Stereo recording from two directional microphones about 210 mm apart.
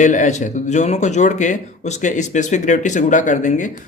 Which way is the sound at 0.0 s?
35° left (ahead or behind).